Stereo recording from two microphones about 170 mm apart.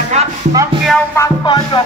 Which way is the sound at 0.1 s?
40° right (ahead or behind).